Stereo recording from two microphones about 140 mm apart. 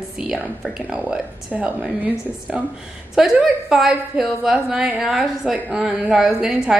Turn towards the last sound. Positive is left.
turn(degrees=-5)  # may be behind; listen again after turning